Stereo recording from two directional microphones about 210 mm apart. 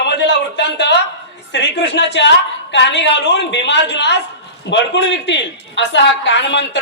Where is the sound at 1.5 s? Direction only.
60° left (ahead or behind).